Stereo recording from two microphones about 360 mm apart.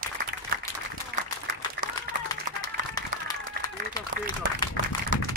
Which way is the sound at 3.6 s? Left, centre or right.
Right.